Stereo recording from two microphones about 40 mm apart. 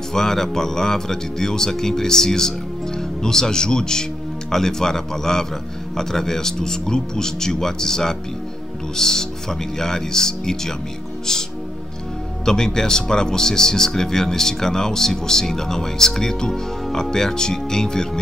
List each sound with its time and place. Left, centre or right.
0.1 s a man's voice: centre
12.4 s a man's voice: centre